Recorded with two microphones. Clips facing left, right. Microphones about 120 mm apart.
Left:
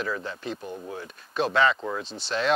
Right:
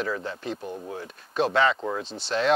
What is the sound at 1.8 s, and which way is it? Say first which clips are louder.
Speech: right 2 dB; 30° right (ahead or behind).